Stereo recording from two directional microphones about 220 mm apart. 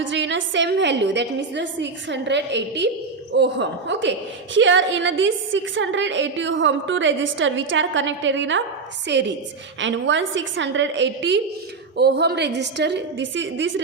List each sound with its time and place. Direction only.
0.0 s a woman's voice: 55° right (ahead or behind)